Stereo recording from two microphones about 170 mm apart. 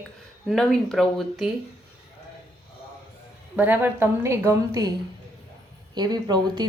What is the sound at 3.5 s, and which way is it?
A woman's voice, 10° right (ahead or behind).